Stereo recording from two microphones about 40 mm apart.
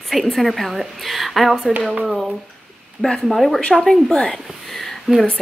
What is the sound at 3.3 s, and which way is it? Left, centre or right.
A woman's voice, centre.